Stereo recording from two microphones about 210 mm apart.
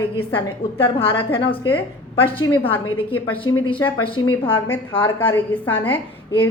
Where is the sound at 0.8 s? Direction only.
25° left (ahead or behind).